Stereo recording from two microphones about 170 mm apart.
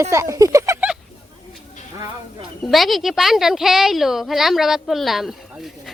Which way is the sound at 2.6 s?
Centre (ahead or behind).